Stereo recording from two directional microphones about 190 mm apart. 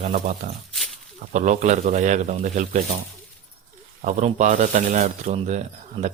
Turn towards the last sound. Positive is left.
turn(degrees=-35)  # may be behind; listen again after turning